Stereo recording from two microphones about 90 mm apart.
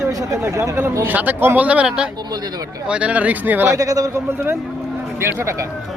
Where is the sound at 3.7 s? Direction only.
40° right (ahead or behind).